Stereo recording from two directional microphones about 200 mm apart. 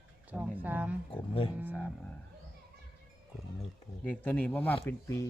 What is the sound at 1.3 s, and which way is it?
Speech, 25° left (ahead or behind).